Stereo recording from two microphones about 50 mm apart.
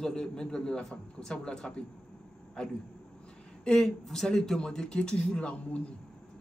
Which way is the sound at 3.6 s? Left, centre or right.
Centre.